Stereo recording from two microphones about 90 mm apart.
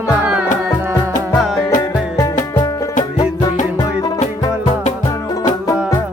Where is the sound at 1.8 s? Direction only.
35° left (ahead or behind).